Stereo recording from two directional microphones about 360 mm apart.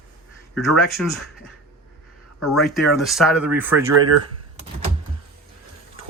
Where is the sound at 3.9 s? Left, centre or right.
Right.